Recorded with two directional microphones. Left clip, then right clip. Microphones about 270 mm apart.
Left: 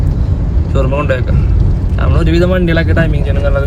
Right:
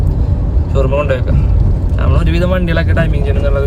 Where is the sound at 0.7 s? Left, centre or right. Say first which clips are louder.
Even; centre.